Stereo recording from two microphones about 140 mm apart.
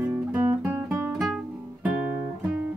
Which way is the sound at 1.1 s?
5° right (ahead or behind).